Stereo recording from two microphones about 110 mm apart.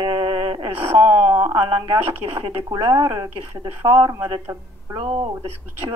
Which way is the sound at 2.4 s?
35° right (ahead or behind).